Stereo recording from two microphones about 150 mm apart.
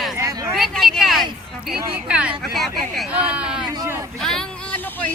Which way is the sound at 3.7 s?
20° right (ahead or behind).